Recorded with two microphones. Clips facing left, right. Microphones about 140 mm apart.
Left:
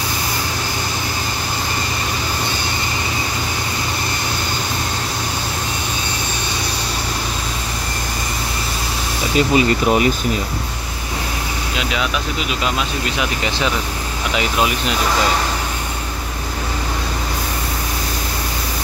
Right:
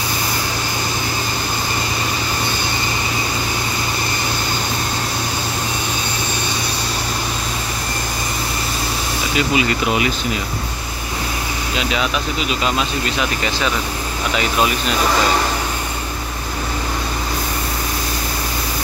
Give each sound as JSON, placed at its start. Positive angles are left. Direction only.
{"t": 9.6, "sound": "speech", "side_deg": 40}